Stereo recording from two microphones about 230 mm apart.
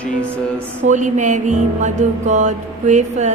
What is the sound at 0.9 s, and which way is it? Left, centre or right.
Music, right.